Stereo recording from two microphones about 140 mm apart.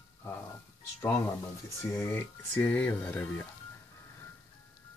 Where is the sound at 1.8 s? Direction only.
15° left (ahead or behind).